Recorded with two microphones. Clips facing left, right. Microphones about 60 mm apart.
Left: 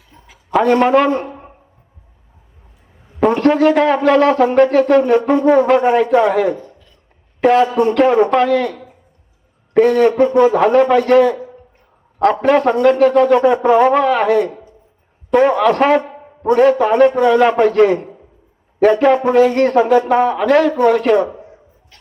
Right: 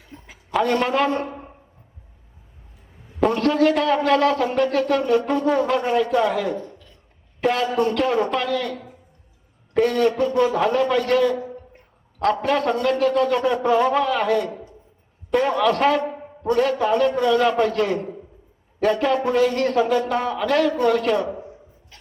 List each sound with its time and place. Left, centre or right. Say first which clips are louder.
0.6 s a man's voice: left 8 dB; left
3.2 s a man's voice: left 6 dB; left
7.4 s a man's voice: left 8 dB; left
9.8 s a man's voice: left 7 dB; left